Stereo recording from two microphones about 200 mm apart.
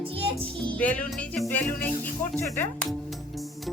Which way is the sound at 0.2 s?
25° right (ahead or behind).